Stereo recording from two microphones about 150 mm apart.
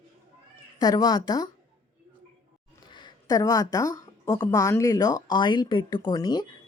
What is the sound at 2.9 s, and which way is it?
Speech, 30° left (ahead or behind).